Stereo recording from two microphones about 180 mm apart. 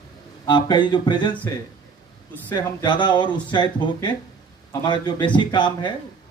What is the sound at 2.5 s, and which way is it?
Speech, 25° left (ahead or behind).